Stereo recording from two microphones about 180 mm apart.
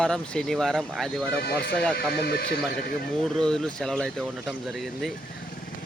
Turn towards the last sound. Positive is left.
turn(degrees=0)  # may be behind; listen again after turning